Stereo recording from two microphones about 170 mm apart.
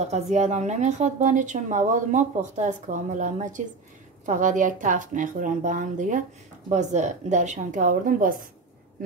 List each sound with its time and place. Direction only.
0.0 s a woman's voice: 40° right (ahead or behind)